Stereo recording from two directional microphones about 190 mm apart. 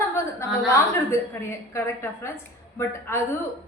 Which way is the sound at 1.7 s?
15° left (ahead or behind).